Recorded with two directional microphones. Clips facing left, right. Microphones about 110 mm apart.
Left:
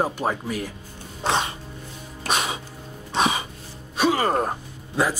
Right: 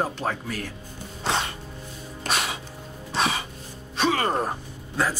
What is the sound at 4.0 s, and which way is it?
Gasp, 10° left (ahead or behind).